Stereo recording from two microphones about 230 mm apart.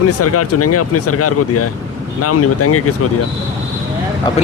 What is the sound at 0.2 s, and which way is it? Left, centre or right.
Speech, left.